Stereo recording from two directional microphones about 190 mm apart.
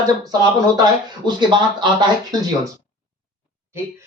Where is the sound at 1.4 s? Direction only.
25° right (ahead or behind).